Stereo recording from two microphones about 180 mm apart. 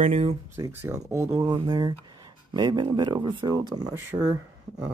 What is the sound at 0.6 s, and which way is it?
Speech, 15° right (ahead or behind).